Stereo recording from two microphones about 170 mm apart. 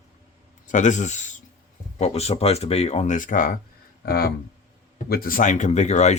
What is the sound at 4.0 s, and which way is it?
Speech, 65° left (ahead or behind).